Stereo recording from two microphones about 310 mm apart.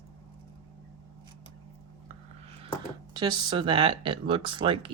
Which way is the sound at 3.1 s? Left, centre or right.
Centre.